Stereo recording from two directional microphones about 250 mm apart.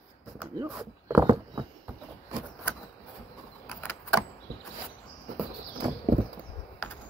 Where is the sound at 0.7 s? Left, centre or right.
Centre.